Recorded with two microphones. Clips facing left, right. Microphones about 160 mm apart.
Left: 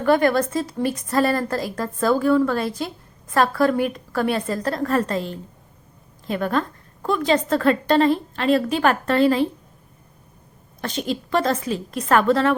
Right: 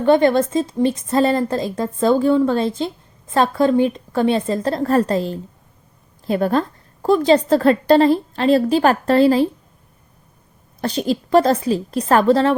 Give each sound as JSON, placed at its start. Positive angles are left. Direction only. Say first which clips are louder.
{"t": 0.0, "sound": "a woman's voice", "louder": "right 4 dB", "side_deg": -25}
{"t": 10.8, "sound": "a woman's voice", "louder": "right 5 dB", "side_deg": -35}